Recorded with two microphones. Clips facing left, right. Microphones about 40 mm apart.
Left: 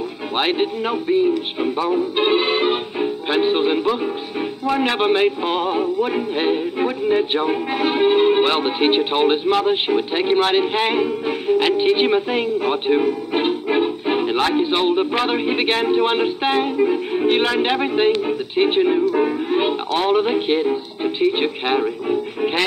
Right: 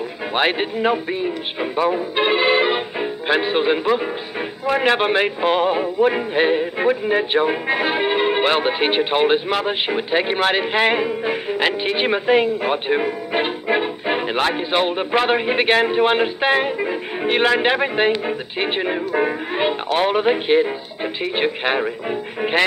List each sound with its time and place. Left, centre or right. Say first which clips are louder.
0.3 s speech: even; centre
2.1 s music: right 3 dB; centre
3.5 s speech: right 1 dB; centre
10.5 s music: even; centre
11.7 s speech: left 4 dB; centre
18.9 s speech: left 3 dB; right
22.4 s music: right 4 dB; centre